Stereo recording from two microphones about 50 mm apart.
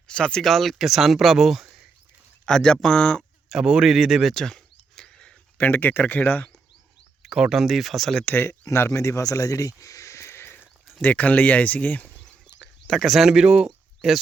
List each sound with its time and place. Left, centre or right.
0.1 s speech: centre
0.5 s speech: centre
2.5 s speech: centre
3.5 s speech: centre
4.4 s a sound: centre
5.5 s speech: left
7.2 s speech: centre
8.2 s speech: left
8.4 s speech: left
11.0 s speech: left
12.9 s speech: centre